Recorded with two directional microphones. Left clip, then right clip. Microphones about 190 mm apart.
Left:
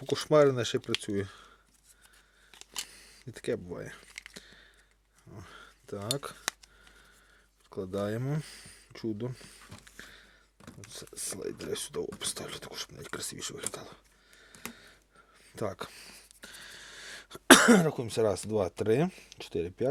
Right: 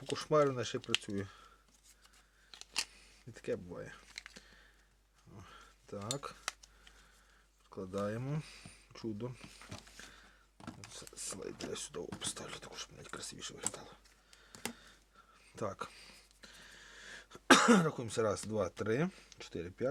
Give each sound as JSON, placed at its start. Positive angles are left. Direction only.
{"t": 0.1, "sound": "speech", "side_deg": 35}
{"t": 2.9, "sound": "a sound", "side_deg": 40}
{"t": 5.3, "sound": "speech", "side_deg": 35}
{"t": 7.7, "sound": "speech", "side_deg": 30}
{"t": 10.9, "sound": "speech", "side_deg": 30}
{"t": 15.5, "sound": "speech", "side_deg": 30}